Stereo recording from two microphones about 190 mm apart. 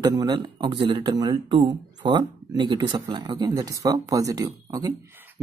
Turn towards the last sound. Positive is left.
turn(degrees=-20)  # may be behind; listen again after turning